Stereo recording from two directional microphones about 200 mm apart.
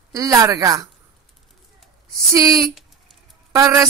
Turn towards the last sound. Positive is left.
turn(degrees=-15)  # may be behind; listen again after turning